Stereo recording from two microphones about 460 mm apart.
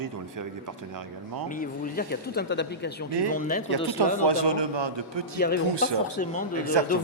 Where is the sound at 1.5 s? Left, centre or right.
Centre.